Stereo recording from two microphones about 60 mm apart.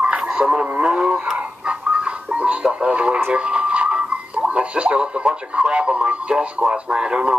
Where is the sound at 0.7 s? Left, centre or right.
Right.